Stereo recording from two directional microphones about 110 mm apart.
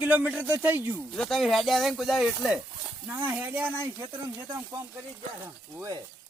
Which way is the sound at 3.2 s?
15° right (ahead or behind).